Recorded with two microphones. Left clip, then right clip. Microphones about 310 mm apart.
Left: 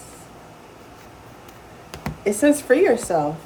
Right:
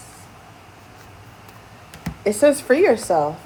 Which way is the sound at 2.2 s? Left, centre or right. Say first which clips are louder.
Right 2 dB; centre.